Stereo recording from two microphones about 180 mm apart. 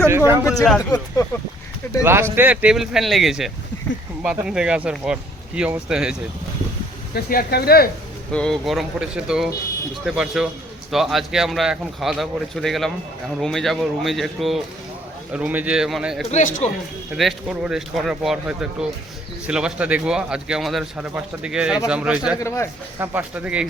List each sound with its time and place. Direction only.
0.4 s a man's voice: centre (ahead or behind)
0.8 s speech: 20° left (ahead or behind)
2.0 s a man's voice: 15° right (ahead or behind)
7.1 s speech: 55° left (ahead or behind)
8.3 s a man's voice: 5° left (ahead or behind)
16.3 s speech: 40° left (ahead or behind)
17.1 s a man's voice: 5° right (ahead or behind)
22.4 s a man's voice: 15° left (ahead or behind)
23.0 s speech: 10° right (ahead or behind)